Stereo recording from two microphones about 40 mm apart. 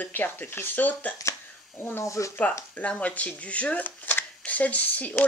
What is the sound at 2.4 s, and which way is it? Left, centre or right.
Speech, left.